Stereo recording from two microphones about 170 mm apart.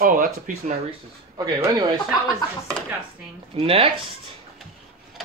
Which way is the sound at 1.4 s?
25° right (ahead or behind).